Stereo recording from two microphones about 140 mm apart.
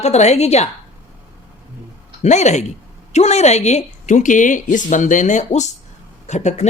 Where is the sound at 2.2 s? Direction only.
55° left (ahead or behind).